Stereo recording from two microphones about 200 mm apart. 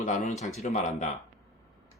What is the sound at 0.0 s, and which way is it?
Speech, 35° left (ahead or behind).